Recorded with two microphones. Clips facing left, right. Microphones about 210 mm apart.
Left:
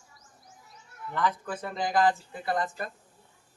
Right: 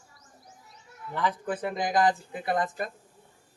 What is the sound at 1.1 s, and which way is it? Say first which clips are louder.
Speech: right 1 dB; 15° right (ahead or behind).